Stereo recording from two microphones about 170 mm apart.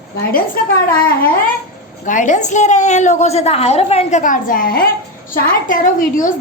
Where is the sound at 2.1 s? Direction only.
45° left (ahead or behind).